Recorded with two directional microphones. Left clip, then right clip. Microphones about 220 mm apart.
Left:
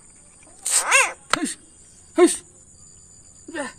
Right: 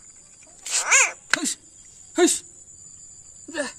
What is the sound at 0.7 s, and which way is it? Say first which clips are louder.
Cat: left 1 dB; centre (ahead or behind).